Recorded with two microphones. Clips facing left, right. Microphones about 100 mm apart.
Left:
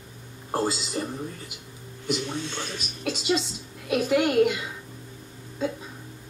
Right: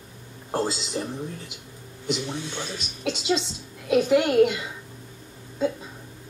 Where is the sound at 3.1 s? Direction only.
5° left (ahead or behind).